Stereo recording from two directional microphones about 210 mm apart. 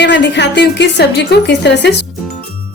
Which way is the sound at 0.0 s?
55° left (ahead or behind).